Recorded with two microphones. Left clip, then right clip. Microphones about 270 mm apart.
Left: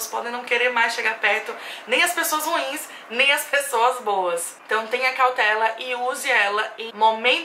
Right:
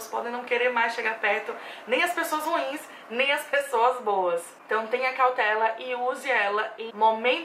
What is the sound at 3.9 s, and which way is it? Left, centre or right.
Speech, right.